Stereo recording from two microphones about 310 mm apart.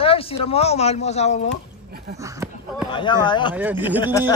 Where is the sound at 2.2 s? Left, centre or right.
Centre.